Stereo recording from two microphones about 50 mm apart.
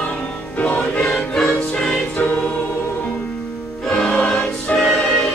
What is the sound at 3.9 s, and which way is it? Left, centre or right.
Choir, centre.